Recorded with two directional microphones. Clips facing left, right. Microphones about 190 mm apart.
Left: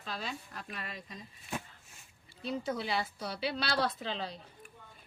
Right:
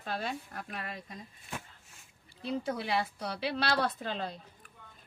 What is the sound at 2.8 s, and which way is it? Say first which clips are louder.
A woman's voice: right 2 dB; 60° right (ahead or behind).